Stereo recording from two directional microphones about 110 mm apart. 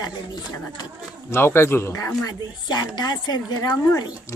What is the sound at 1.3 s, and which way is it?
Speech, 25° left (ahead or behind).